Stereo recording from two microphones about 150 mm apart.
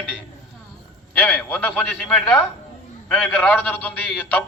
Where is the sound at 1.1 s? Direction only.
10° left (ahead or behind).